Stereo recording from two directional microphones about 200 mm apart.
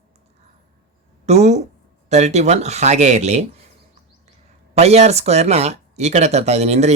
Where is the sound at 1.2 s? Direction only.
35° right (ahead or behind).